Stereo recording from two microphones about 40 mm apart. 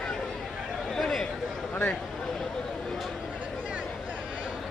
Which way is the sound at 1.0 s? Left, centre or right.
Centre.